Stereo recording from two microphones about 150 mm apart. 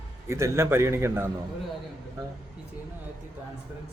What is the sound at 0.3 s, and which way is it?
Speech, 20° right (ahead or behind).